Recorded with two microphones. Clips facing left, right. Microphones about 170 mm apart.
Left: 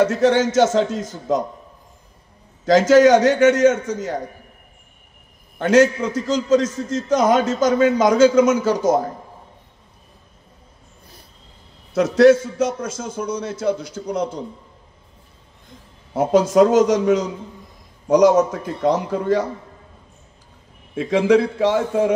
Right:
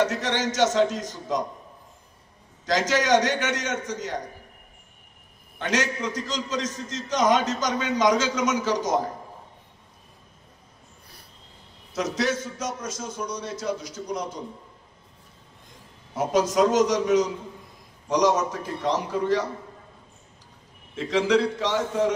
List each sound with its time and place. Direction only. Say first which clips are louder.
0.0 s a man's voice: left 9 dB; 50° left (ahead or behind)
2.6 s a man's voice: left 12 dB; 55° left (ahead or behind)
5.6 s a man's voice: left 12 dB; 55° left (ahead or behind)
11.9 s a man's voice: left 14 dB; 55° left (ahead or behind)
16.1 s a man's voice: left 7 dB; 55° left (ahead or behind)
20.9 s a man's voice: left 6 dB; 55° left (ahead or behind)